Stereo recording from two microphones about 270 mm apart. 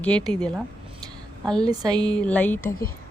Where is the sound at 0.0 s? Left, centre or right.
Centre.